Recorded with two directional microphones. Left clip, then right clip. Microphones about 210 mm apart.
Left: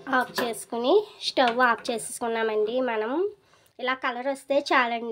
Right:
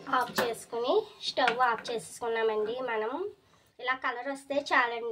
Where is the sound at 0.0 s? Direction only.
45° left (ahead or behind).